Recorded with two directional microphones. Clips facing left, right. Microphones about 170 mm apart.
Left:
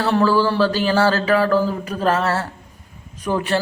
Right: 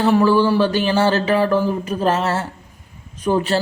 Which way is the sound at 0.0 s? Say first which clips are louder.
Right 2 dB; 15° right (ahead or behind).